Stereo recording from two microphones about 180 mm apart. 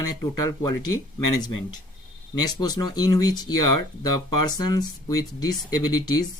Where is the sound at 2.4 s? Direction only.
20° left (ahead or behind).